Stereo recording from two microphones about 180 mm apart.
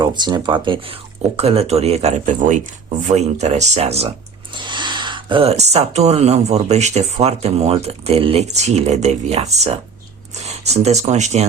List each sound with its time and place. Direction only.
0.0 s speech: 25° right (ahead or behind); by 11.4 s 40° right (ahead or behind)